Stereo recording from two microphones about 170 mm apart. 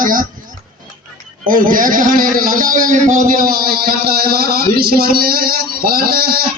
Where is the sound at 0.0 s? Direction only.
55° right (ahead or behind).